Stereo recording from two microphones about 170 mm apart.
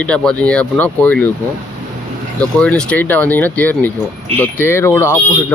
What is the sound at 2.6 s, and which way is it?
Speech, 5° left (ahead or behind).